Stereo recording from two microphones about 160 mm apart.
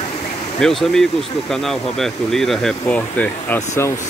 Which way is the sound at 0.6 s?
Centre (ahead or behind).